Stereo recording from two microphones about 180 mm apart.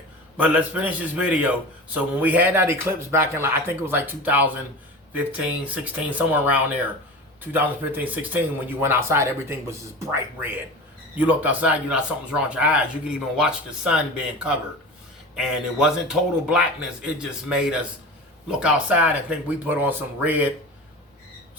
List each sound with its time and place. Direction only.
0.3 s a man's voice: 5° right (ahead or behind)
5.6 s a man's voice: 10° right (ahead or behind)